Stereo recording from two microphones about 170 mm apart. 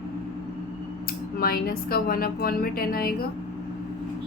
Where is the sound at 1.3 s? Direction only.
60° left (ahead or behind).